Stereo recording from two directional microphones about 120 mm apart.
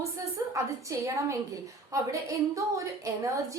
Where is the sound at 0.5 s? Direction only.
25° right (ahead or behind).